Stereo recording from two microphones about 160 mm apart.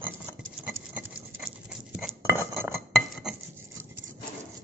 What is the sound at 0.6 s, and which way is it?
Patter, 5° right (ahead or behind).